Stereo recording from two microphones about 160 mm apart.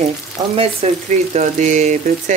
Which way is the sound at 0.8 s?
40° right (ahead or behind).